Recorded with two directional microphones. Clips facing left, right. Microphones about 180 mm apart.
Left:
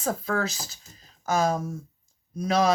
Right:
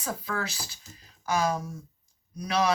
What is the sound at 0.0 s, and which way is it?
Speech, 45° left (ahead or behind).